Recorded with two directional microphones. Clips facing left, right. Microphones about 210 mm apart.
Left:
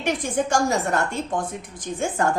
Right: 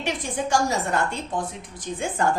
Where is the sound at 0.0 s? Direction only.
50° left (ahead or behind).